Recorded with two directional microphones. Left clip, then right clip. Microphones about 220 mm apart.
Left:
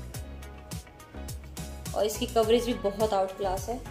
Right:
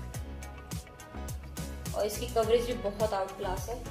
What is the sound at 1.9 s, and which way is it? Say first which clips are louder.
Speech: left 4 dB; 50° left (ahead or behind).